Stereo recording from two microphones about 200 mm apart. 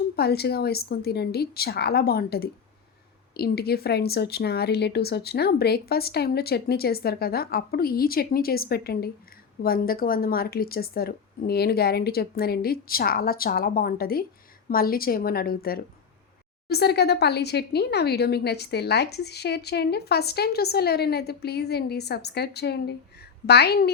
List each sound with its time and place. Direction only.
0.2 s speech: 55° left (ahead or behind)